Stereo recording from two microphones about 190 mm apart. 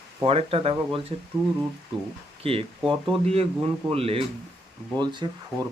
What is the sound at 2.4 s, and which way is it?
Speech, 30° right (ahead or behind).